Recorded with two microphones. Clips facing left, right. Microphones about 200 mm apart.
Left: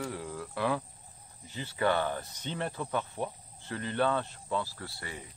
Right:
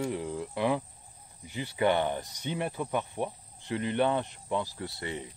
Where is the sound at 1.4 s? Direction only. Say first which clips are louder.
Right 3 dB; 15° right (ahead or behind).